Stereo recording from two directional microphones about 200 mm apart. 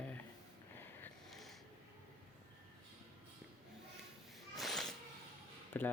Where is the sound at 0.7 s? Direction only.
10° left (ahead or behind).